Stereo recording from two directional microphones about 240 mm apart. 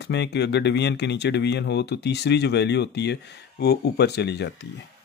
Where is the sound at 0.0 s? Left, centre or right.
Left.